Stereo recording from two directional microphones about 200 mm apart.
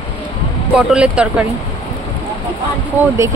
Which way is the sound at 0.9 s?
5° right (ahead or behind).